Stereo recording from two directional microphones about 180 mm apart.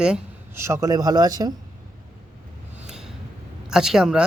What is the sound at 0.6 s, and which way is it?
Speech, 15° right (ahead or behind).